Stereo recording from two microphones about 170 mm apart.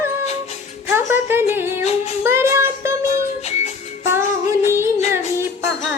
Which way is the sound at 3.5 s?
40° left (ahead or behind).